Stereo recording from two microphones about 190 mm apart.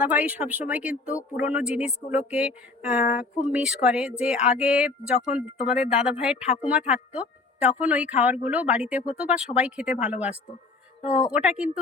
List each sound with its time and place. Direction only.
0.0 s speech: 5° right (ahead or behind)